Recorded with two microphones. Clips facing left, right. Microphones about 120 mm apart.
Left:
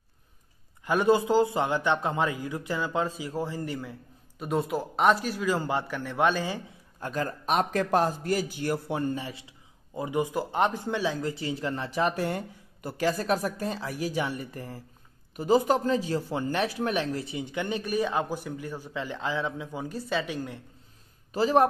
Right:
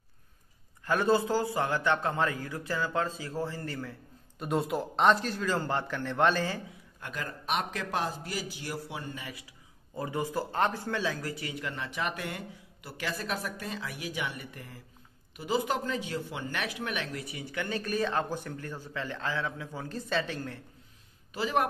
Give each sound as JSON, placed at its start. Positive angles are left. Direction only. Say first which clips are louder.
{"t": 0.8, "sound": "a man's voice", "louder": "left 3 dB", "side_deg": 15}
{"t": 4.4, "sound": "a man's voice", "louder": "left 2 dB", "side_deg": 0}
{"t": 7.0, "sound": "a man's voice", "louder": "left 8 dB", "side_deg": 35}
{"t": 9.2, "sound": "speech", "louder": "left 5 dB", "side_deg": 25}
{"t": 9.9, "sound": "speech", "louder": "left 4 dB", "side_deg": 15}
{"t": 21.3, "sound": "speech", "louder": "left 7 dB", "side_deg": 35}